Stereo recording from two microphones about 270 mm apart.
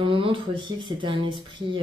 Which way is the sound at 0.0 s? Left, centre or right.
Centre.